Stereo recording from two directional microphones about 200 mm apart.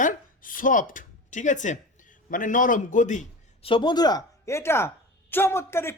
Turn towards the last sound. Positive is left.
turn(degrees=10)  # may be behind; listen again after turning